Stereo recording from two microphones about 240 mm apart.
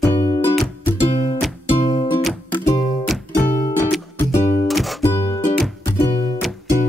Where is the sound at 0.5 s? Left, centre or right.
Centre.